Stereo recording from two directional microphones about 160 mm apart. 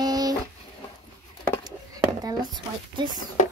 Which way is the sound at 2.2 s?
25° right (ahead or behind).